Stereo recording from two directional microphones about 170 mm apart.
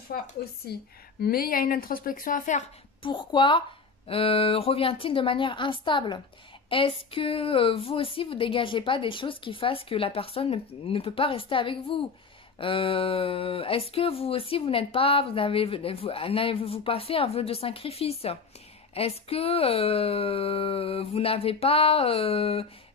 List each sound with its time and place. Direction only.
0.1 s speech: 60° left (ahead or behind)
3.0 s a woman's voice: 25° left (ahead or behind)